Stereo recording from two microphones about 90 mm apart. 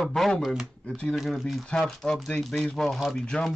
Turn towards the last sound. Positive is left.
turn(degrees=10)  # may be behind; listen again after turning